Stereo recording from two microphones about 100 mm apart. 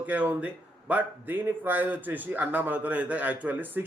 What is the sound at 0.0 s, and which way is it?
A man's voice, 15° right (ahead or behind).